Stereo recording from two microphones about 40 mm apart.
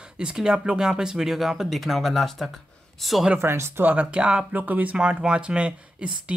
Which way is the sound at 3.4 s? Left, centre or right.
Right.